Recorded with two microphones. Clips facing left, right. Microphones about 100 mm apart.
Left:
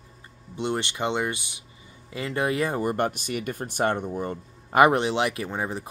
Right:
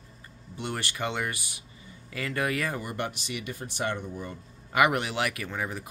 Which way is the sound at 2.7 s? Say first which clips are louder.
Left 8 dB; 45° left (ahead or behind).